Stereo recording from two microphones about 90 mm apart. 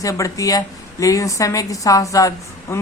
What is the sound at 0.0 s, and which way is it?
A man's voice, 40° left (ahead or behind).